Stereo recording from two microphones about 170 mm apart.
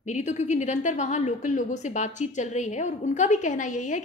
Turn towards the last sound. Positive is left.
turn(degrees=45)  # may be behind; listen again after turning